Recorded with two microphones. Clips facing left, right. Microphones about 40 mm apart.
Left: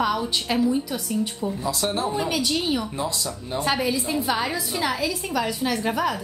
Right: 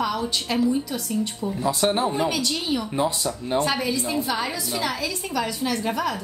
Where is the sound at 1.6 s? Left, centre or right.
Right.